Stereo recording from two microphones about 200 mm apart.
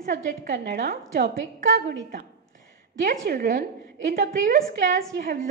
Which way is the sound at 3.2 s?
45° right (ahead or behind).